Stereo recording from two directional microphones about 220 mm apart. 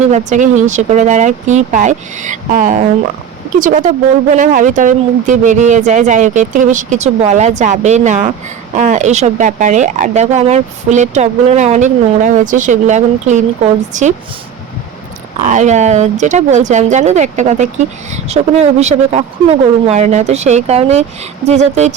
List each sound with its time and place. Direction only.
0.1 s speech: 35° right (ahead or behind)
15.4 s speech: 35° right (ahead or behind)